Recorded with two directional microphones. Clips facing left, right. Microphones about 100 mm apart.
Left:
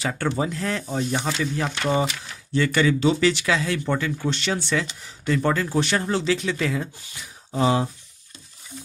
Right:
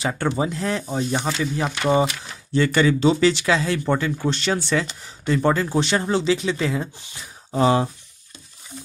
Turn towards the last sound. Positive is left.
turn(degrees=-45)  # may be behind; listen again after turning